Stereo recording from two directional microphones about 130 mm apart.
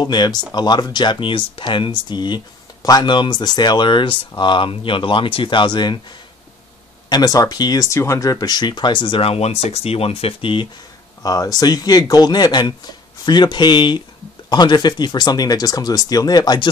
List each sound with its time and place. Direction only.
0.0 s speech: 30° left (ahead or behind)
7.1 s speech: 30° left (ahead or behind)
11.2 s speech: 30° left (ahead or behind)